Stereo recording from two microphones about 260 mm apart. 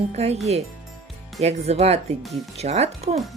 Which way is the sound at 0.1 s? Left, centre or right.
Right.